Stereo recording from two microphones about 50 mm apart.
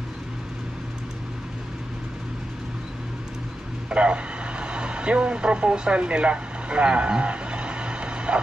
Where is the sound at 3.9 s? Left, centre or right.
Right.